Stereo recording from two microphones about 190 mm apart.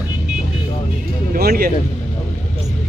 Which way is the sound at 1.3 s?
50° right (ahead or behind).